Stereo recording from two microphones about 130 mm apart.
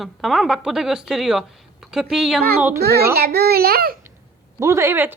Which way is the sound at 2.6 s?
15° right (ahead or behind).